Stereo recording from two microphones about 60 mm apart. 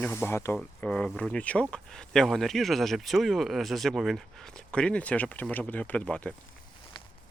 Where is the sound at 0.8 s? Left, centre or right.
Centre.